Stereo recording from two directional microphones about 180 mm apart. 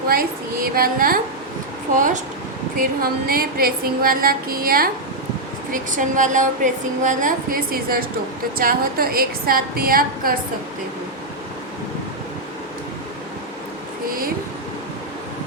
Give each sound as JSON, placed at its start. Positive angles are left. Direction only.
{"t": 0.1, "sound": "a woman's voice", "side_deg": -55}